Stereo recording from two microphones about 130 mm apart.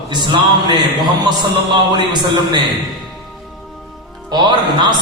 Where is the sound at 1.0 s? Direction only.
35° right (ahead or behind).